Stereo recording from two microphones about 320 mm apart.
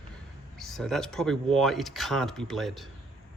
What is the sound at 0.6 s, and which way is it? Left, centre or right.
Speech, centre.